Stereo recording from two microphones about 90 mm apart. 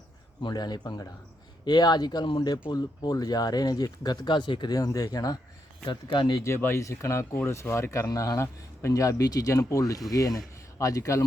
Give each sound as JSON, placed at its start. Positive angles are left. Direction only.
{"t": 0.4, "sound": "speech", "side_deg": 50}
{"t": 4.7, "sound": "speech", "side_deg": 45}
{"t": 6.1, "sound": "speech", "side_deg": 60}
{"t": 6.4, "sound": "speech", "side_deg": 25}